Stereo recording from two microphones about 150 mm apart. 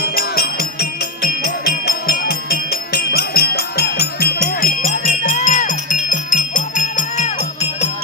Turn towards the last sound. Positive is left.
turn(degrees=55)  # may be behind; listen again after turning